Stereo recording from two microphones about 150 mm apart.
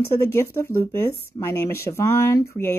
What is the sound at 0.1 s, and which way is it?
Speech, 15° left (ahead or behind).